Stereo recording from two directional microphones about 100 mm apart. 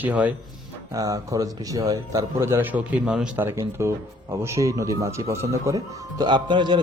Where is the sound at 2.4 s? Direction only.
25° right (ahead or behind).